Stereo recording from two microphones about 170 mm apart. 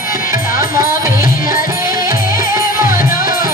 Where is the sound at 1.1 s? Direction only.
55° left (ahead or behind).